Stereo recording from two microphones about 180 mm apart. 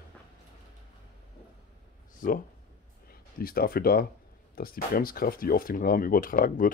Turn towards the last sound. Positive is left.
turn(degrees=50)  # may be behind; listen again after turning